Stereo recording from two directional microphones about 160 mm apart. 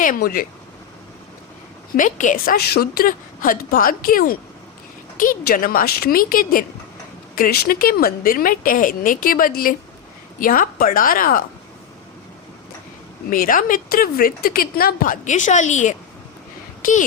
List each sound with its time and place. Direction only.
0.0 s speech: 60° left (ahead or behind)
2.0 s speech: 55° left (ahead or behind)
13.3 s speech: 60° left (ahead or behind)